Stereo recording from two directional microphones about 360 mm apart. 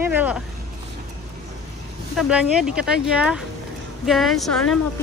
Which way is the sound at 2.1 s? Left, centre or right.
Centre.